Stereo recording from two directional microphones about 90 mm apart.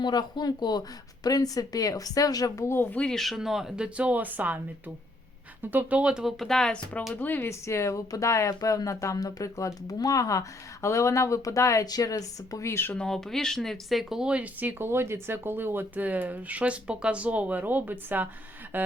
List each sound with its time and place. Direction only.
0.0 s speech: 50° left (ahead or behind)
2.6 s speech: 25° left (ahead or behind)
2.9 s speech: 10° left (ahead or behind); by 4.6 s 20° right (ahead or behind)
5.7 s speech: 15° right (ahead or behind); by 7.0 s 10° left (ahead or behind)
7.1 s speech: 20° left (ahead or behind)
12.9 s speech: 10° left (ahead or behind); by 18.3 s 20° right (ahead or behind)
18.7 s a sound: 20° right (ahead or behind)